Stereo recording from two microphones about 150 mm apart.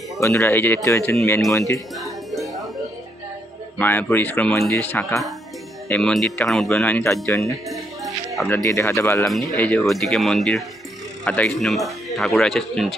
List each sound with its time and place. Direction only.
0.2 s speech: 20° left (ahead or behind)
2.0 s music: centre (ahead or behind)
3.8 s speech: 15° left (ahead or behind)
7.3 s speech: 20° left (ahead or behind)
9.2 s speech: centre (ahead or behind)